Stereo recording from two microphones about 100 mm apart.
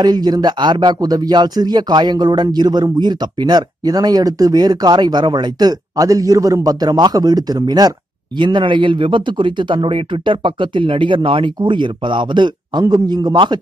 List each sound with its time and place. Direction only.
0.0 s speech: 45° right (ahead or behind)
8.4 s speech: 55° right (ahead or behind)